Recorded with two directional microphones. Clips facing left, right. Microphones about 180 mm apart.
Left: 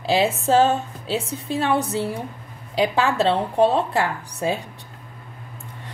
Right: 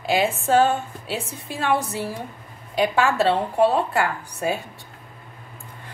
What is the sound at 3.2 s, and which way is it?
Speech, 25° left (ahead or behind).